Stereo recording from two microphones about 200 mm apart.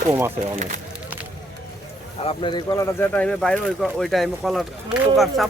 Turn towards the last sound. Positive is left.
turn(degrees=0)  # may be behind; listen again after turning